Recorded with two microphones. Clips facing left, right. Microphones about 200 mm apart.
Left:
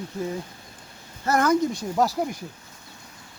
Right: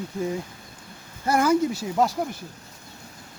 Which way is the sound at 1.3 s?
10° right (ahead or behind).